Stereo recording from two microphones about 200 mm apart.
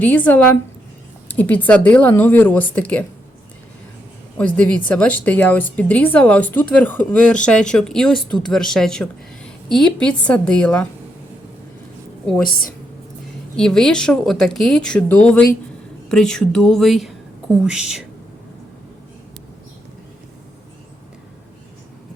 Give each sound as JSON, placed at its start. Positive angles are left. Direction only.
{"t": 0.0, "sound": "speech", "side_deg": 5}
{"t": 4.4, "sound": "speech", "side_deg": 5}
{"t": 12.5, "sound": "a woman's voice", "side_deg": 45}
{"t": 13.6, "sound": "speech", "side_deg": 5}